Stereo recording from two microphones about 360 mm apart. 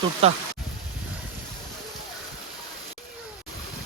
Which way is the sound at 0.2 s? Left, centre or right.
Centre.